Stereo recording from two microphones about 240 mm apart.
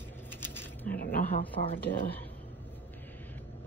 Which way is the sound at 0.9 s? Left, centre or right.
Left.